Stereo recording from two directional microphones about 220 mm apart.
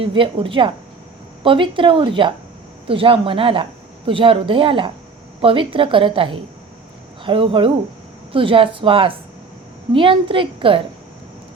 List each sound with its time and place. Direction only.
0.0 s a woman's voice: 25° right (ahead or behind)